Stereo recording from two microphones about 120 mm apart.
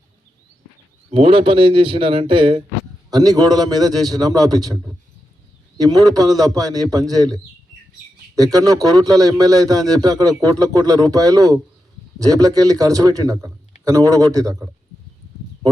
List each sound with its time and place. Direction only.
1.1 s speech: 50° right (ahead or behind)
3.1 s a man's voice: 35° right (ahead or behind)
8.4 s a man's voice: 30° right (ahead or behind)